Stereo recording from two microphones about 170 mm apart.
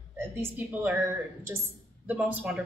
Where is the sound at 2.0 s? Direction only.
10° right (ahead or behind).